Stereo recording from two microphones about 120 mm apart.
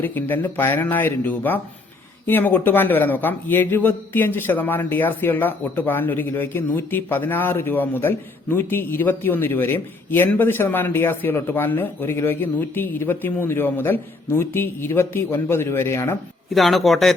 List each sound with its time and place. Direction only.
0.0 s a man's voice: 15° left (ahead or behind)
16.6 s speech: centre (ahead or behind)